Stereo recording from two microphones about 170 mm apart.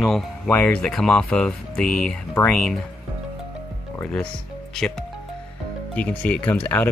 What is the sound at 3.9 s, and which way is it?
Speech, 5° left (ahead or behind).